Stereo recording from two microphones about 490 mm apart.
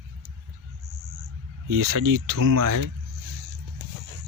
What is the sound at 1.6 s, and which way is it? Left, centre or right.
Speech, right.